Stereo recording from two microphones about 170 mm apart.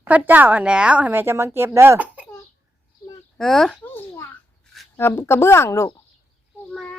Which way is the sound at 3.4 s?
Centre (ahead or behind).